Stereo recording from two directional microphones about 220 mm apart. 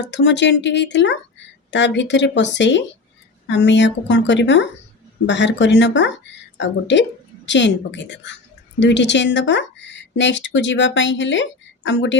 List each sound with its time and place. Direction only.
0.0 s speech: 55° left (ahead or behind)